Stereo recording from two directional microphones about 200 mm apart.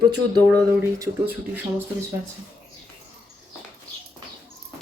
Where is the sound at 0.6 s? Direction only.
15° right (ahead or behind).